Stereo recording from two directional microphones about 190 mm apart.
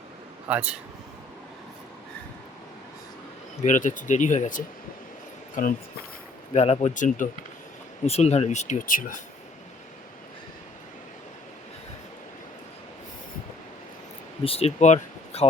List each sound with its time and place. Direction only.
0.4 s speech: 5° right (ahead or behind)
3.6 s speech: 40° left (ahead or behind)
14.4 s speech: 30° left (ahead or behind)